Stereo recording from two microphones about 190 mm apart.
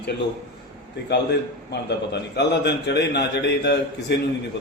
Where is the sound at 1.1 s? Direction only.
60° left (ahead or behind).